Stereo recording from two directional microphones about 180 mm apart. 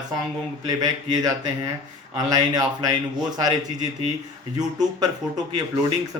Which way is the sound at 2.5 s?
20° right (ahead or behind).